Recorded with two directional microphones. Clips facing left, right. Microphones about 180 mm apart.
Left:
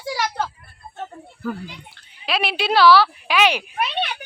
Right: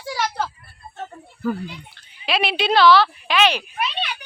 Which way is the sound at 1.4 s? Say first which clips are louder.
Right 4 dB; centre (ahead or behind).